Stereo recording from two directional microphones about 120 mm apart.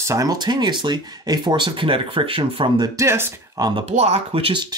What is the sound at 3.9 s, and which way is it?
Speech, 65° right (ahead or behind).